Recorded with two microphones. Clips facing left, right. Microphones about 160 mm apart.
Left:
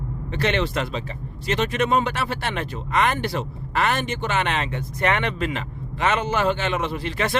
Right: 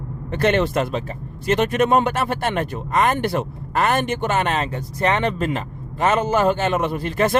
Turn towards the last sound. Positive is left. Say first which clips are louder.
# right 5 dB
turn(degrees=-45)  # may be behind; listen again after turning